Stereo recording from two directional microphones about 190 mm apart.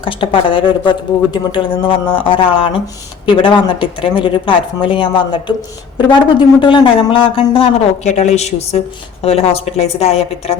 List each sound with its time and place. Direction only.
0.0 s a woman's voice: 25° left (ahead or behind)